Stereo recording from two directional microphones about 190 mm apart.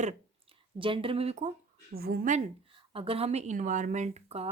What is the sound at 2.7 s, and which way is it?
A woman's voice, 30° right (ahead or behind).